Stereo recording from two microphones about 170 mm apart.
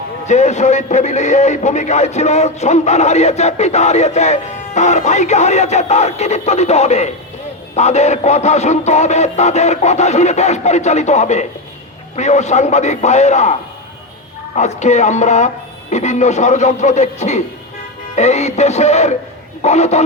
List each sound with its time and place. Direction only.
0.3 s a man's voice: 45° left (ahead or behind)
7.8 s music: 40° left (ahead or behind)
12.1 s a man's voice: 45° left (ahead or behind)
18.1 s music: 40° left (ahead or behind)